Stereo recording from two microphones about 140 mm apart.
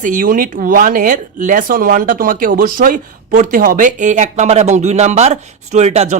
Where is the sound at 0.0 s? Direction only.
70° right (ahead or behind).